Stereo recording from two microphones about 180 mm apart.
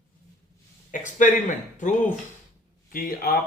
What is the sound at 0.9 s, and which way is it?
Speech, 45° left (ahead or behind).